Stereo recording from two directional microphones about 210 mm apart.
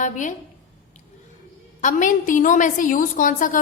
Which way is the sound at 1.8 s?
35° left (ahead or behind).